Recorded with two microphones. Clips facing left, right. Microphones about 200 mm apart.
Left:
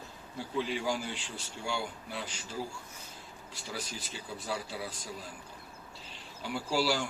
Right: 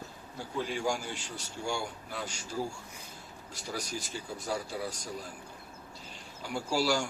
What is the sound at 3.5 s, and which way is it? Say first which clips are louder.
Speech: right 3 dB; 45° right (ahead or behind).